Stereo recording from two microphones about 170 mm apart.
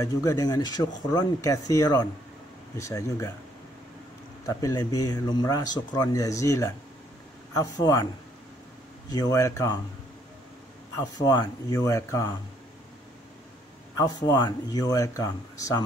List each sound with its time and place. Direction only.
0.0 s speech: 20° left (ahead or behind)
4.5 s speech: 20° left (ahead or behind)
9.1 s speech: 20° left (ahead or behind)
11.0 s speech: 20° left (ahead or behind)
13.9 s speech: 20° left (ahead or behind)